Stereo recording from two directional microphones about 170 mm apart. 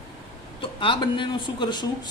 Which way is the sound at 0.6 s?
30° left (ahead or behind).